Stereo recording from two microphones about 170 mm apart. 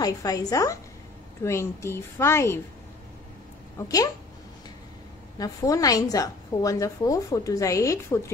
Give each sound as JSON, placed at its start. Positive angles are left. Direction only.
{"t": 0.0, "sound": "a woman's voice", "side_deg": 20}
{"t": 5.4, "sound": "a woman's voice", "side_deg": 20}